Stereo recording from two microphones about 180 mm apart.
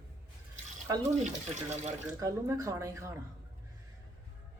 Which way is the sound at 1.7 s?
40° right (ahead or behind).